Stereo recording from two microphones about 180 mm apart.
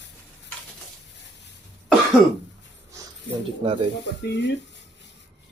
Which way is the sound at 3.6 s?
30° right (ahead or behind).